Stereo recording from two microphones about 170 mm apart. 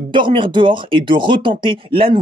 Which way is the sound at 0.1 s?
30° right (ahead or behind).